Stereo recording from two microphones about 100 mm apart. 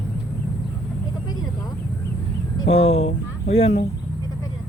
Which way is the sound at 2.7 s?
90° left.